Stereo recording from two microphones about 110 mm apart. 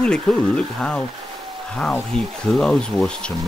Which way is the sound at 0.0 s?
10° left (ahead or behind).